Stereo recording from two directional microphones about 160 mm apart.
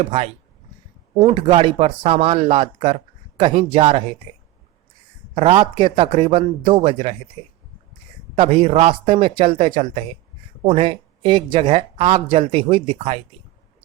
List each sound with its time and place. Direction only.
0.0 s speech: 40° right (ahead or behind)
5.3 s speech: 35° right (ahead or behind)
8.4 s speech: 40° right (ahead or behind)